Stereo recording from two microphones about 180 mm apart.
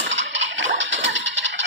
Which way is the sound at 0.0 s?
90° right.